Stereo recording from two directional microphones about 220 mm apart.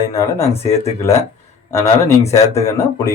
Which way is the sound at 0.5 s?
25° left (ahead or behind).